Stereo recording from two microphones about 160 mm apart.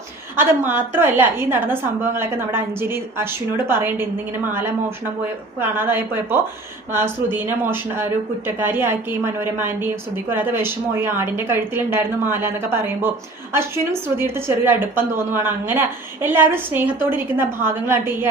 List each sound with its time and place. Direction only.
0.3 s a woman's voice: 10° right (ahead or behind)